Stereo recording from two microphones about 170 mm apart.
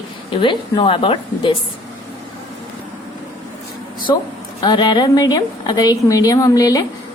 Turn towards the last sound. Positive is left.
turn(degrees=20)  # may be behind; listen again after turning